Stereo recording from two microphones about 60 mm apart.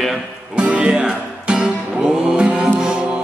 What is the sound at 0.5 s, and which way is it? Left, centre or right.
Music, centre.